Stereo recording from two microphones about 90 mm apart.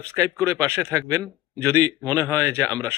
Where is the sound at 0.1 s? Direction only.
35° right (ahead or behind).